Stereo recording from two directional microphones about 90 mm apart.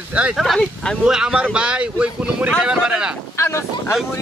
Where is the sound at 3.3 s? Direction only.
30° left (ahead or behind).